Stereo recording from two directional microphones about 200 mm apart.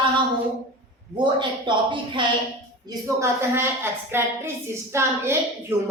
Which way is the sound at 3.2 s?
10° right (ahead or behind).